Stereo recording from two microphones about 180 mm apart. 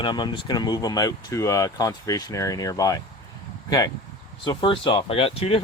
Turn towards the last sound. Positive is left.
turn(degrees=30)  # may be behind; listen again after turning